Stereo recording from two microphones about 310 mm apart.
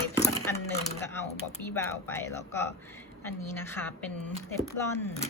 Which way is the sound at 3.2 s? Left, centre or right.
Centre.